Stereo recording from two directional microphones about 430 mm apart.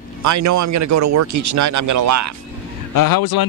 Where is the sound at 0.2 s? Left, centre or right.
Right.